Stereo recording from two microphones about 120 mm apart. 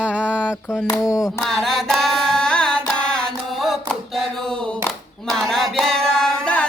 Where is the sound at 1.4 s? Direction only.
Centre (ahead or behind).